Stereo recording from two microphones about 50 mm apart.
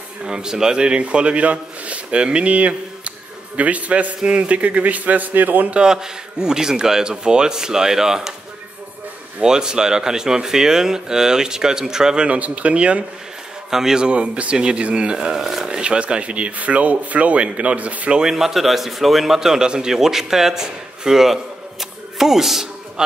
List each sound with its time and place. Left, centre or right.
0.2 s a man's voice: centre; by 5.8 s right
5.8 s speech: centre
9.4 s speech: centre
12.3 s a man's voice: right
13.7 s a man's voice: centre
15.3 s a man's voice: centre; by 18.2 s right
18.2 s a man's voice: centre